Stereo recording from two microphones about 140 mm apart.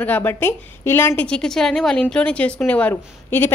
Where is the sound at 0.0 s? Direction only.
15° left (ahead or behind).